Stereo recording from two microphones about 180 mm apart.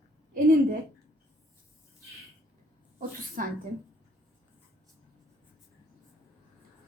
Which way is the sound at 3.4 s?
50° right (ahead or behind).